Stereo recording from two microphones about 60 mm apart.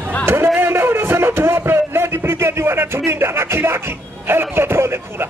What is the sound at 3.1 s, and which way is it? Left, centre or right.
Music, right.